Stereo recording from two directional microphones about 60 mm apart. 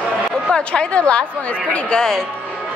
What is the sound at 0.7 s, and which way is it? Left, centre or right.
A woman's voice, centre.